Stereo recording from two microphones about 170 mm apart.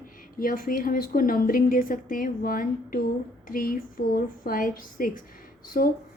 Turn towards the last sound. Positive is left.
turn(degrees=55)  # may be behind; listen again after turning